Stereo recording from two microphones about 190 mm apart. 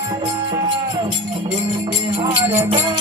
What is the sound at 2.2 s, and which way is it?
Music, 30° right (ahead or behind).